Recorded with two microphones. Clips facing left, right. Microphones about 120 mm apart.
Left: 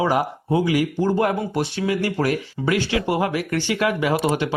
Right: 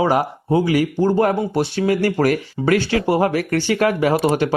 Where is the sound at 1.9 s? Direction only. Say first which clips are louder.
Right 5 dB; 50° right (ahead or behind).